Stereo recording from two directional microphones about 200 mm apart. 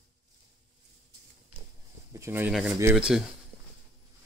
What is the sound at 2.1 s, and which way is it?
Speech, 10° right (ahead or behind).